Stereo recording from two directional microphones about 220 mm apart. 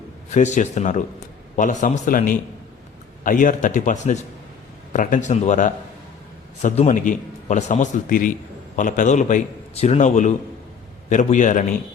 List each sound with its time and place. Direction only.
0.3 s a man's voice: 30° left (ahead or behind)